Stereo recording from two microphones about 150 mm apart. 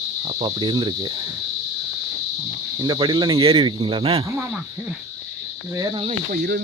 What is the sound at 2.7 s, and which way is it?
Cricket, 30° right (ahead or behind).